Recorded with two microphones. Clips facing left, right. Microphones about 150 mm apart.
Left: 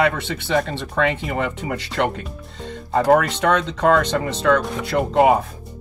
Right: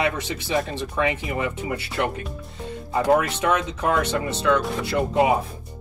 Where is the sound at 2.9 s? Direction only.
70° left (ahead or behind).